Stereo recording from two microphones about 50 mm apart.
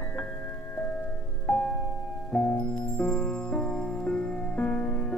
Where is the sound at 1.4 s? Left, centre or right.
Centre.